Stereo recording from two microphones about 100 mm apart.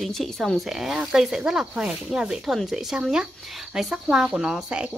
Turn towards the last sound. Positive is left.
turn(degrees=-10)  # may be behind; listen again after turning